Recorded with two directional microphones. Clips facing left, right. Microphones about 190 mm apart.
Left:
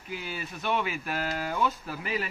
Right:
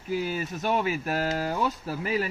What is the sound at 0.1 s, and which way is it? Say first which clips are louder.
Speech: right 8 dB; 40° right (ahead or behind).